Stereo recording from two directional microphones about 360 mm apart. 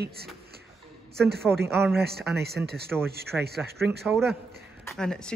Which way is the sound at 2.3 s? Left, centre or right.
Right.